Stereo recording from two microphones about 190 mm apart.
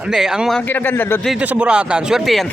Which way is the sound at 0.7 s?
10° left (ahead or behind).